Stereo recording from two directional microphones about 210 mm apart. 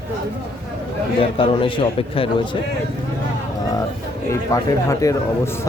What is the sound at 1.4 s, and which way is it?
A man's voice, 25° left (ahead or behind).